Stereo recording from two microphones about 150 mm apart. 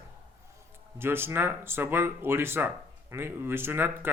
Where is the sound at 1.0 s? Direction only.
15° right (ahead or behind).